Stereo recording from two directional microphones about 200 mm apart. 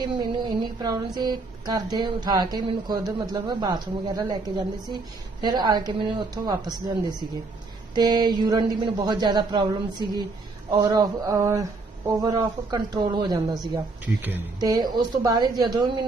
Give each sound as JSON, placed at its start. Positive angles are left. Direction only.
{"t": 0.0, "sound": "speech", "side_deg": -20}
{"t": 14.2, "sound": "speech", "side_deg": -10}